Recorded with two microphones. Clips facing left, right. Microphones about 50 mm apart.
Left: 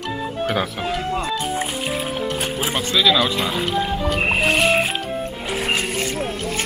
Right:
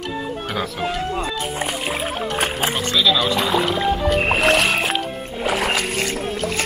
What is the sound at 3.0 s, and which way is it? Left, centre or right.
Speech, centre.